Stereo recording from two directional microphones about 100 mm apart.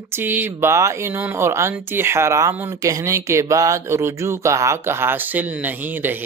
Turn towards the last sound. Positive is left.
turn(degrees=-20)  # may be behind; listen again after turning